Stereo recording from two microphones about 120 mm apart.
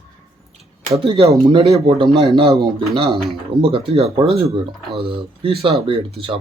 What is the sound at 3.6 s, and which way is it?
Speech, 50° right (ahead or behind).